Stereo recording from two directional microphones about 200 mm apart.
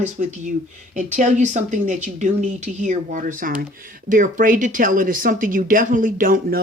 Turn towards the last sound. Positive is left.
turn(degrees=-45)  # may be behind; listen again after turning